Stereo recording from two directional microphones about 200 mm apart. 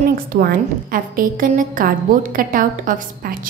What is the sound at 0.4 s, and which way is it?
A woman's voice, 45° right (ahead or behind).